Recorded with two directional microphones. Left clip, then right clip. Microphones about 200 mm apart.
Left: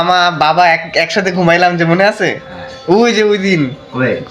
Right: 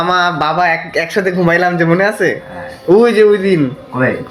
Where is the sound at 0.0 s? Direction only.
10° left (ahead or behind).